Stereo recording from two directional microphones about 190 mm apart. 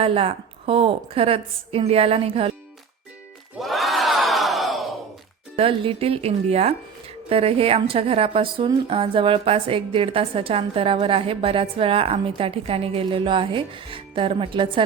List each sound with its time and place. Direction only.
0.0 s a woman's voice: 30° right (ahead or behind)
3.6 s crowd: centre (ahead or behind)
5.5 s a woman's voice: 30° right (ahead or behind)